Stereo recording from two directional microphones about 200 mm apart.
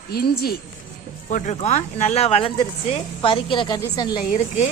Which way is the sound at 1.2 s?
40° left (ahead or behind).